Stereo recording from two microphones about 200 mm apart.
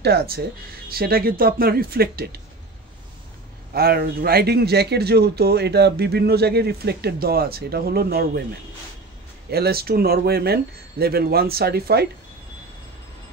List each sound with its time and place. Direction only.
0.0 s speech: 55° right (ahead or behind)
3.7 s speech: 50° right (ahead or behind)
9.5 s speech: 50° right (ahead or behind)